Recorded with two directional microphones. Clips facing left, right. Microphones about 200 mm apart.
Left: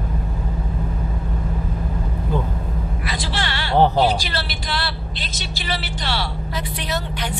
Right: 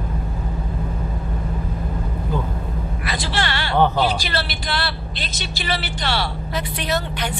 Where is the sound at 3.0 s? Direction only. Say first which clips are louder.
Right 3 dB; 60° right (ahead or behind).